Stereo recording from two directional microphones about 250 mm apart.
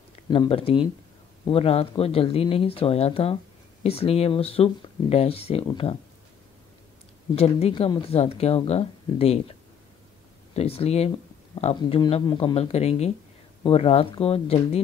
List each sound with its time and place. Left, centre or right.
0.1 s speech: left
7.3 s speech: left
10.5 s speech: left